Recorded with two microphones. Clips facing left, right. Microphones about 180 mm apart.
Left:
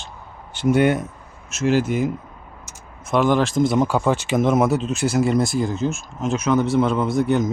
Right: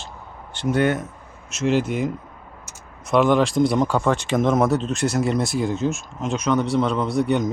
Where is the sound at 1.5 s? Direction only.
Centre (ahead or behind).